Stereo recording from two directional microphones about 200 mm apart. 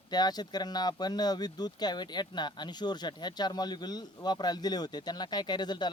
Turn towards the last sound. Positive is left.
turn(degrees=20)  # may be behind; listen again after turning